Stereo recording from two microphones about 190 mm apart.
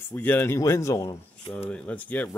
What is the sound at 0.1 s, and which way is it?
Speech, 10° left (ahead or behind).